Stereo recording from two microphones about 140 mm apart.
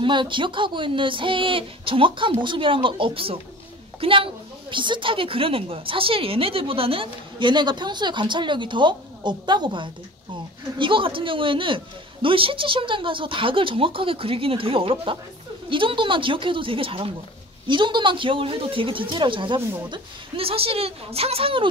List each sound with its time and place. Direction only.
0.0 s a woman's voice: 35° right (ahead or behind)